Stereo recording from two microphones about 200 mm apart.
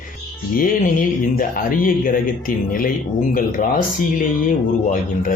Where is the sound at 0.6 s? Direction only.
45° left (ahead or behind).